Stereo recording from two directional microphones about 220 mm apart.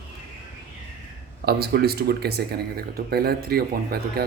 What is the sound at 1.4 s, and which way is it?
Speech, 45° right (ahead or behind).